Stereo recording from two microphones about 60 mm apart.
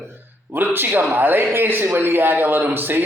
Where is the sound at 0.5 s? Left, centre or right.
Right.